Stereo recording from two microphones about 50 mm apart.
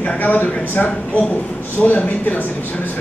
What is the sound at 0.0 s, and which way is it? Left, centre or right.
Speech, left.